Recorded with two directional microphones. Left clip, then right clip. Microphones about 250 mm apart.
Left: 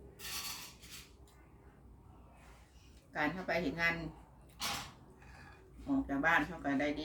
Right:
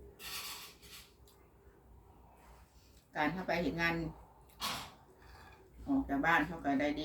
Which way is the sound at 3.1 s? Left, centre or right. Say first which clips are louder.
Right 1 dB; centre.